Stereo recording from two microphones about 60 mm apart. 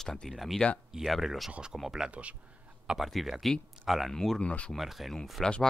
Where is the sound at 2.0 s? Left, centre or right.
Right.